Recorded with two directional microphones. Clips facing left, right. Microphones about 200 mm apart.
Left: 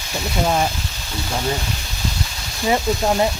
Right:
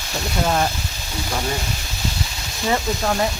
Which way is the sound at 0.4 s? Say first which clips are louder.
Left 1 dB; 10° left (ahead or behind).